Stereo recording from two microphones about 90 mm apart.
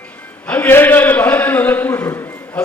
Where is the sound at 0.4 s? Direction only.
20° left (ahead or behind).